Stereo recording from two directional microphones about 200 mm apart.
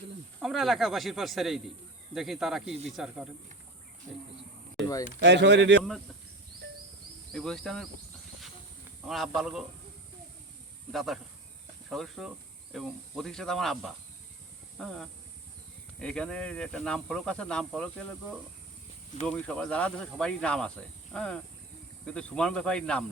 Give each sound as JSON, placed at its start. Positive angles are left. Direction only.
{"t": 0.4, "sound": "speech", "side_deg": 0}
{"t": 5.2, "sound": "speech", "side_deg": -60}
{"t": 7.3, "sound": "speech", "side_deg": 0}
{"t": 9.0, "sound": "speech", "side_deg": 0}
{"t": 10.9, "sound": "speech", "side_deg": 0}
{"t": 19.3, "sound": "speech", "side_deg": 5}